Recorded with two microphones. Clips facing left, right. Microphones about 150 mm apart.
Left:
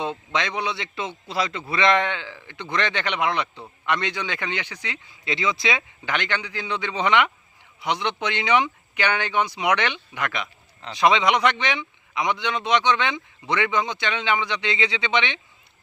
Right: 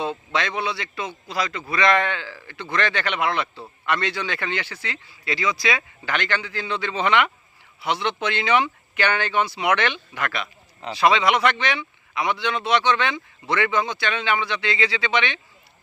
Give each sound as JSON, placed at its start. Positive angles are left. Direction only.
{"t": 0.3, "sound": "a man's voice", "side_deg": 20}